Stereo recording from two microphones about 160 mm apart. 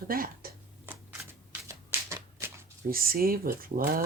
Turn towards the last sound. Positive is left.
turn(degrees=-65)  # may be behind; listen again after turning